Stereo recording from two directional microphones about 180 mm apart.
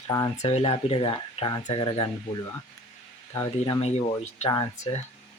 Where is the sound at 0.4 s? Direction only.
30° left (ahead or behind).